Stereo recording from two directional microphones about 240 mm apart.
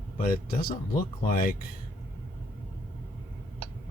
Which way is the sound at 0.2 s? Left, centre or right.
Left.